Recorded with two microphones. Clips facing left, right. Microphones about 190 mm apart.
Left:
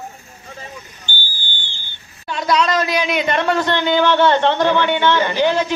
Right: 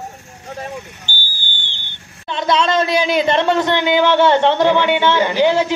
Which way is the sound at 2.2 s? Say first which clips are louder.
Right 1 dB; 25° right (ahead or behind).